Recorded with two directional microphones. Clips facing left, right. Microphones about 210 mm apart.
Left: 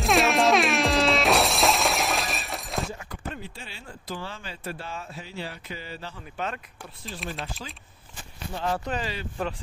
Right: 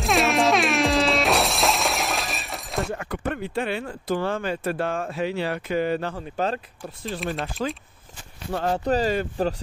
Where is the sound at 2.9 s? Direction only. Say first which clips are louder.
Right 9 dB; 65° right (ahead or behind).